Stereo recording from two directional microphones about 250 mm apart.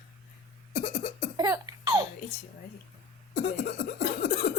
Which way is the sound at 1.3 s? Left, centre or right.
Centre.